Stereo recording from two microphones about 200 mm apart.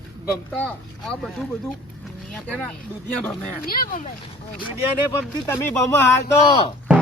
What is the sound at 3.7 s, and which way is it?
Speech, 45° left (ahead or behind).